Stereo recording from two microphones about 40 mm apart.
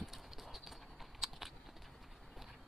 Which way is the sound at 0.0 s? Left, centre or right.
Centre.